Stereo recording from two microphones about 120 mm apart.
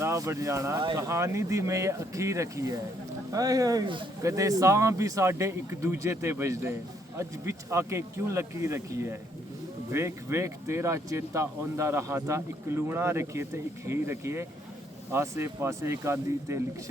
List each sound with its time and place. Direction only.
0.0 s speech: 25° right (ahead or behind)